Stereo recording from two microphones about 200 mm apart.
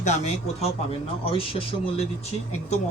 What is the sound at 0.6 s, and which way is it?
A man's voice, 30° left (ahead or behind).